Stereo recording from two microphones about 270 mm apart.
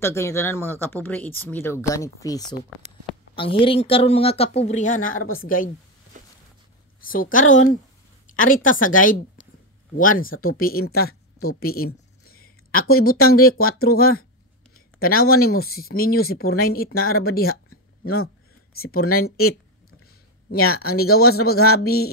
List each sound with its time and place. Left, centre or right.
0.0 s a woman's voice: centre; by 5.0 s left
5.0 s speech: left
7.0 s a woman's voice: left
11.4 s a sound: left
12.9 s speech: left
18.8 s speech: left
20.4 s speech: left
21.8 s speech: left